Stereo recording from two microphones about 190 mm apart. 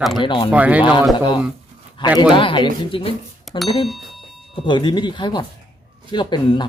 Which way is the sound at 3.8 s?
Centre (ahead or behind).